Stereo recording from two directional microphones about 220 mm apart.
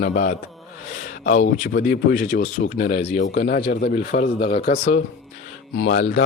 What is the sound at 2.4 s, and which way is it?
Speech, 50° left (ahead or behind).